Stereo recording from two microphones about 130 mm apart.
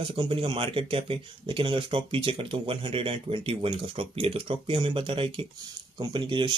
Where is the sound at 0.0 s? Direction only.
40° right (ahead or behind).